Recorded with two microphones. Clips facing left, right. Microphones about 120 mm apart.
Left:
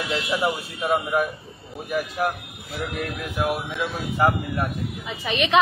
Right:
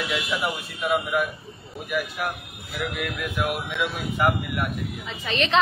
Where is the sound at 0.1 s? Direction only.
35° left (ahead or behind).